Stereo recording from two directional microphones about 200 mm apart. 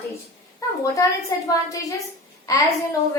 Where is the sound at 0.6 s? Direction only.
15° left (ahead or behind).